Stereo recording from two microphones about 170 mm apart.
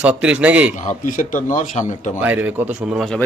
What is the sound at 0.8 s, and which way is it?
A man's voice, 50° left (ahead or behind).